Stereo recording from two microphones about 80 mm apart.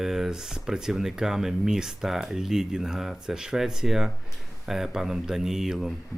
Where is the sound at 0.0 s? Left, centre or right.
Centre.